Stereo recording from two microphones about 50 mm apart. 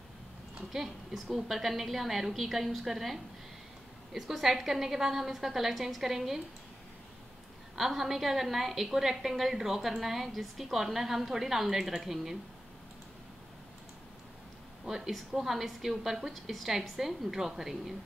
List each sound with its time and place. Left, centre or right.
0.7 s a woman's voice: centre
7.7 s a woman's voice: centre
14.9 s a woman's voice: centre